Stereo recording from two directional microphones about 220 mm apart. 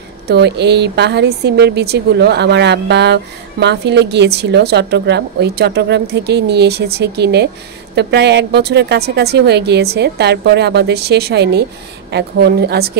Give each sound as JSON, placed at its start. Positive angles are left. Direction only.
{"t": 0.3, "sound": "a woman's voice", "side_deg": -50}